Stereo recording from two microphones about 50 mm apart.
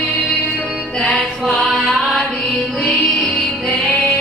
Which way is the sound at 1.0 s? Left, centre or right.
Centre.